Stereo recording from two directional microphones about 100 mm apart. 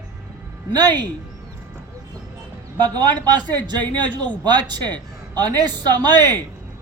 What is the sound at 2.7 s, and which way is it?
Speech, 45° right (ahead or behind).